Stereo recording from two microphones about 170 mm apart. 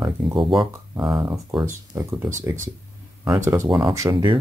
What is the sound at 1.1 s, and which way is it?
Speech, 10° right (ahead or behind).